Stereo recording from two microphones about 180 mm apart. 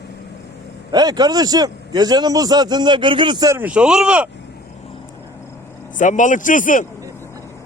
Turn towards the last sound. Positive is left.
turn(degrees=45)  # may be behind; listen again after turning